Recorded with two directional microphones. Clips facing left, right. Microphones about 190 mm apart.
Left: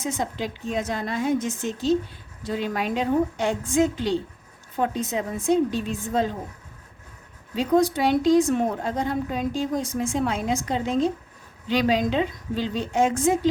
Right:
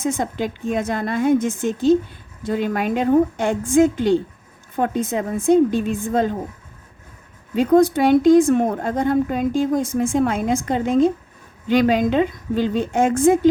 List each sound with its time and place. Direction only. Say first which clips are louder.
0.0 s a woman's voice: right 5 dB; 50° right (ahead or behind)
7.5 s a woman's voice: right 6 dB; 50° right (ahead or behind)